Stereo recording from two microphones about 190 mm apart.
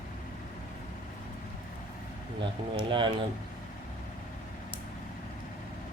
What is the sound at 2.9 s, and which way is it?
Speech, 25° right (ahead or behind).